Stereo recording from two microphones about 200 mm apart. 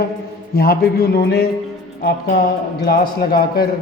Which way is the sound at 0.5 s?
50° left (ahead or behind).